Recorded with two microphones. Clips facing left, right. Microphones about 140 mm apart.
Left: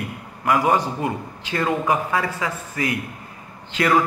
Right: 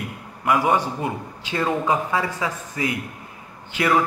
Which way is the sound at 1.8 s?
20° right (ahead or behind).